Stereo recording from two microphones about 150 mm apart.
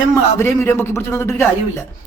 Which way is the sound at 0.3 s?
15° left (ahead or behind).